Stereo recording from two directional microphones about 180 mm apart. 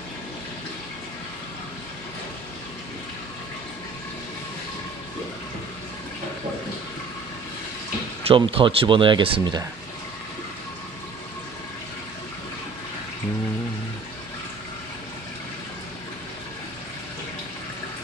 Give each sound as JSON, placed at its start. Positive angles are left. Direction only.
{"t": 8.2, "sound": "speech", "side_deg": -30}